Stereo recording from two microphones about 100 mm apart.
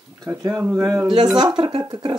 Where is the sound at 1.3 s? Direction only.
50° right (ahead or behind).